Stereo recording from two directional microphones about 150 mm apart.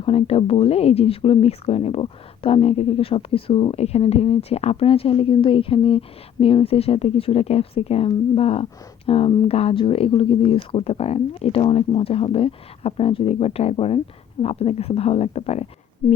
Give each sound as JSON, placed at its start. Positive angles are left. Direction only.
{"t": 0.0, "sound": "speech", "side_deg": 40}